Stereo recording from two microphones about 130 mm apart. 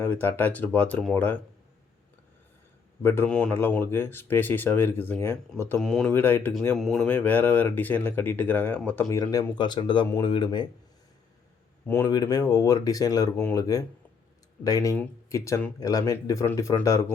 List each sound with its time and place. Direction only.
0.0 s speech: 15° left (ahead or behind)
3.0 s speech: 20° left (ahead or behind)
3.2 s speech: 5° left (ahead or behind)
3.5 s speech: 15° left (ahead or behind)
5.8 s speech: 5° left (ahead or behind)
6.1 s speech: 15° left (ahead or behind)
6.7 s speech: centre (ahead or behind)
7.0 s speech: 15° left (ahead or behind)
9.0 s speech: 30° left (ahead or behind)
11.9 s speech: 15° left (ahead or behind)
12.1 s speech: 30° left (ahead or behind)
13.3 s speech: 10° left (ahead or behind)
13.6 s speech: 25° left (ahead or behind)